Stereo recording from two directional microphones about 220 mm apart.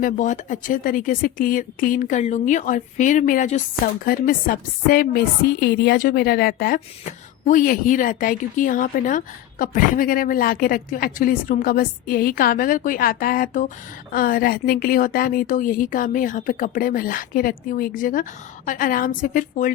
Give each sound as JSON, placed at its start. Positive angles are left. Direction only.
{"t": 0.0, "sound": "speech", "side_deg": 35}